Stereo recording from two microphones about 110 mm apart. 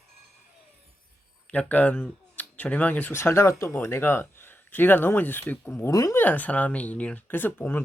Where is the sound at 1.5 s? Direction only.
15° left (ahead or behind).